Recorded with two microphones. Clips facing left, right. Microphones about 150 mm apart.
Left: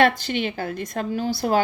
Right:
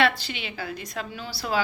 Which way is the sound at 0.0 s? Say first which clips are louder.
Left 5 dB; 50° left (ahead or behind).